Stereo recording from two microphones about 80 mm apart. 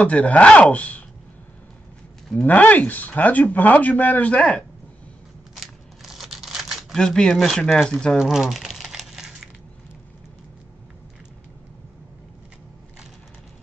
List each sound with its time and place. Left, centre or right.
0.0 s speech: centre
2.4 s speech: centre
5.5 s a sound: centre
8.2 s crumpling: centre